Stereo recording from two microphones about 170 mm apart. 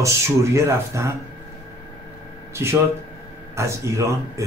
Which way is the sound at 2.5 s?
15° right (ahead or behind).